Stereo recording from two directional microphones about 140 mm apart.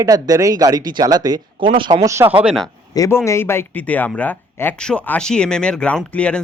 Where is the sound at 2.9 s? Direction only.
25° left (ahead or behind).